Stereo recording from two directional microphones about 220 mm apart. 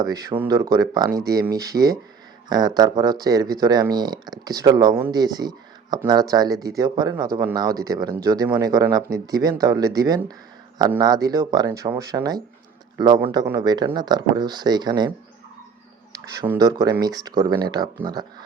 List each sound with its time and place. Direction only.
0.0 s speech: 15° right (ahead or behind)
16.5 s speech: 15° right (ahead or behind)